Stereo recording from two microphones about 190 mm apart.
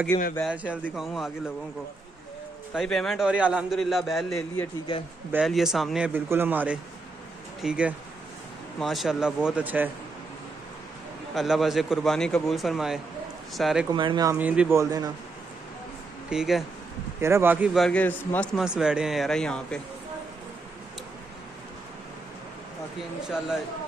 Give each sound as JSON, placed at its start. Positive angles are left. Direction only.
{"t": 0.1, "sound": "a man's voice", "side_deg": 20}
{"t": 0.5, "sound": "a man's voice", "side_deg": -5}
{"t": 2.7, "sound": "speech", "side_deg": 0}
{"t": 11.3, "sound": "speech", "side_deg": 0}
{"t": 13.9, "sound": "speech", "side_deg": -25}
{"t": 14.3, "sound": "a man's voice", "side_deg": -5}
{"t": 16.3, "sound": "speech", "side_deg": 0}
{"t": 17.2, "sound": "a man's voice", "side_deg": -15}
{"t": 17.7, "sound": "speech", "side_deg": 5}
{"t": 23.2, "sound": "speech", "side_deg": -5}